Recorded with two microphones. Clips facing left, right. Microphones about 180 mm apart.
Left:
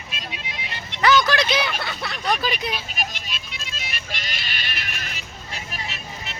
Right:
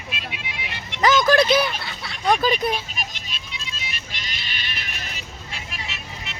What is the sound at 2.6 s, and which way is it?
Speech, 50° right (ahead or behind).